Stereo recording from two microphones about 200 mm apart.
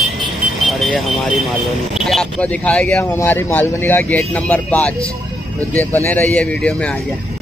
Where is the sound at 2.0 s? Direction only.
Centre (ahead or behind).